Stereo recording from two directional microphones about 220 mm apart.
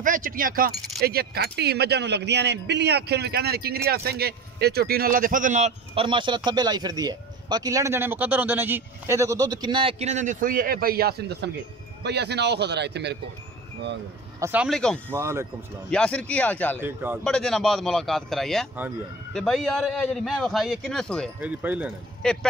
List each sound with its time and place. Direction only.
0.0 s a man's voice: 40° right (ahead or behind)
14.4 s a man's voice: 5° right (ahead or behind)
15.0 s speech: 10° right (ahead or behind)
15.9 s a man's voice: 5° left (ahead or behind)
16.8 s speech: 10° right (ahead or behind)
17.2 s a man's voice: centre (ahead or behind)
22.2 s speech: 5° left (ahead or behind)